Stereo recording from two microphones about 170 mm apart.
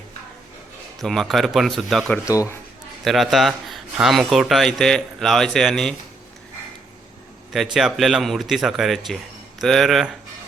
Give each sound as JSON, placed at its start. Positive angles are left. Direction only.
{"t": 1.0, "sound": "speech", "side_deg": 0}
{"t": 2.1, "sound": "speech", "side_deg": 20}
{"t": 3.0, "sound": "speech", "side_deg": 0}
{"t": 7.5, "sound": "speech", "side_deg": 0}